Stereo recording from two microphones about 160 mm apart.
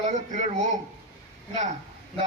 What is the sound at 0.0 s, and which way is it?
Speech, 45° right (ahead or behind).